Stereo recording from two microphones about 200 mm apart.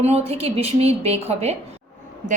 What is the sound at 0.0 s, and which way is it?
A woman's voice, 30° right (ahead or behind).